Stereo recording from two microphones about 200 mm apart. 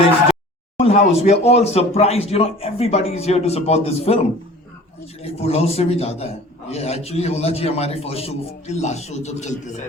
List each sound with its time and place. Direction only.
0.8 s a man's voice: 30° left (ahead or behind)
5.2 s a man's voice: 30° left (ahead or behind)